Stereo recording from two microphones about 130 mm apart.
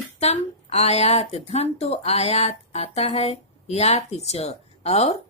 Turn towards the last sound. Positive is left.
turn(degrees=50)  # may be behind; listen again after turning